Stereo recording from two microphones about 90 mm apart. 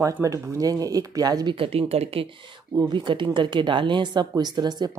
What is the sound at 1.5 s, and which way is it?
Speech, 90° right.